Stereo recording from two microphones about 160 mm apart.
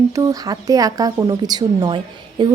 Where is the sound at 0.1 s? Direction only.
20° right (ahead or behind).